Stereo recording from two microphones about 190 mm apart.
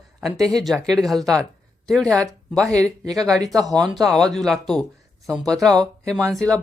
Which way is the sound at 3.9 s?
Centre (ahead or behind).